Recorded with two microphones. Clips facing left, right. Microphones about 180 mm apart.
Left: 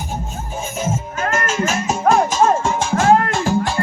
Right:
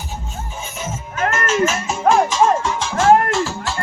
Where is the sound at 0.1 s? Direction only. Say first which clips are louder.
Left 4 dB; 45° left (ahead or behind).